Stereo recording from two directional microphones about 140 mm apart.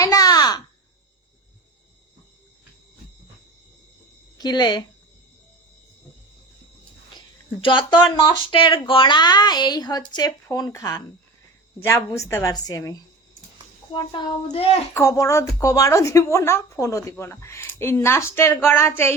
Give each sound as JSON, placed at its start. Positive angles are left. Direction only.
{"t": 0.0, "sound": "a sound", "side_deg": 25}
{"t": 4.4, "sound": "speech", "side_deg": 30}
{"t": 7.6, "sound": "speech", "side_deg": 35}
{"t": 14.9, "sound": "speech", "side_deg": 25}